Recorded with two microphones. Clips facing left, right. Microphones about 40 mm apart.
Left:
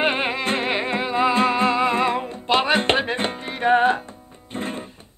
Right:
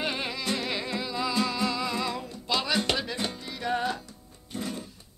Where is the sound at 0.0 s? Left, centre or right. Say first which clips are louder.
Left 9 dB; left.